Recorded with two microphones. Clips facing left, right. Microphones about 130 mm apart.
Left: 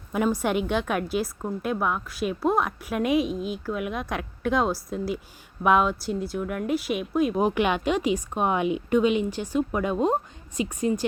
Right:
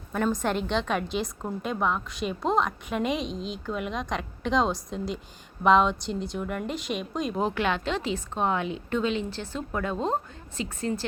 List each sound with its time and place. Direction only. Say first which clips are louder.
0.1 s speech: left 2 dB; 10° left (ahead or behind)
3.3 s speech: left 4 dB; 55° left (ahead or behind)
3.7 s a woman's voice: right 1 dB; 5° left (ahead or behind)